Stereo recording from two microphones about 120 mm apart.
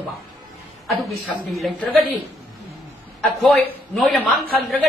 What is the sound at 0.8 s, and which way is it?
Speech, centre (ahead or behind).